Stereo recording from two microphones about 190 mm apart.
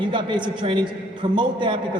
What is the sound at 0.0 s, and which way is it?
A man's voice, 25° right (ahead or behind).